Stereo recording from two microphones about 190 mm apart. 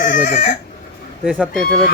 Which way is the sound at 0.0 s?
40° left (ahead or behind).